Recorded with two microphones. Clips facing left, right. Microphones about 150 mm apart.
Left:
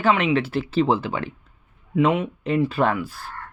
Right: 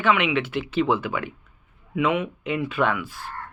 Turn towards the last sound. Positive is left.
turn(degrees=40)  # may be behind; listen again after turning